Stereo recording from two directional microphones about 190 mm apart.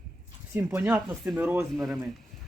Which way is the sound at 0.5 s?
15° right (ahead or behind).